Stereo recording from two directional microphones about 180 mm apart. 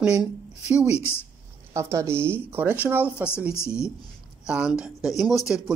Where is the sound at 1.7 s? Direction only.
15° right (ahead or behind).